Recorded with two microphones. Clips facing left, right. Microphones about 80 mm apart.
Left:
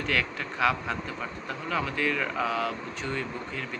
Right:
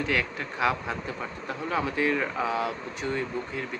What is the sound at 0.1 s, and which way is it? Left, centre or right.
Speech, centre.